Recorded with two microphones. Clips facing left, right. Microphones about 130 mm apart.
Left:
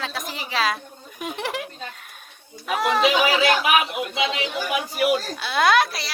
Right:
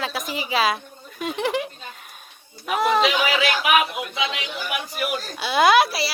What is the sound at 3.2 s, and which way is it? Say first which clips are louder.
Speech: left 2 dB; 30° left (ahead or behind).